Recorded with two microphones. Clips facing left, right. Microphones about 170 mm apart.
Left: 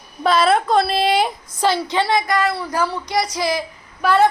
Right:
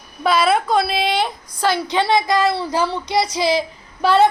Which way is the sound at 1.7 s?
20° right (ahead or behind).